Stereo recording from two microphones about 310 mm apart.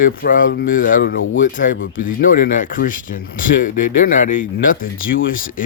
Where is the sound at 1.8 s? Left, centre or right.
Left.